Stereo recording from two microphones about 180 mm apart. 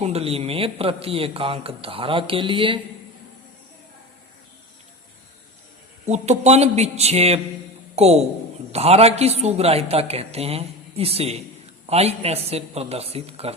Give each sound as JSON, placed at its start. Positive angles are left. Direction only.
{"t": 0.0, "sound": "a man's voice", "side_deg": -35}
{"t": 6.1, "sound": "a man's voice", "side_deg": -40}